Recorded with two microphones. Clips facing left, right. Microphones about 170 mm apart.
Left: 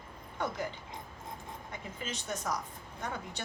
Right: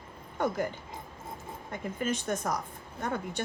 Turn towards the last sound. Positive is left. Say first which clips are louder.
# right 6 dB
turn(degrees=-55)  # may be behind; listen again after turning